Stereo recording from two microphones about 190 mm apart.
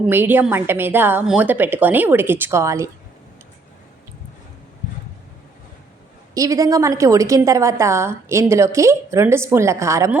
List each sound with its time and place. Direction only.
0.0 s a woman's voice: 10° right (ahead or behind)
6.3 s a woman's voice: 20° right (ahead or behind)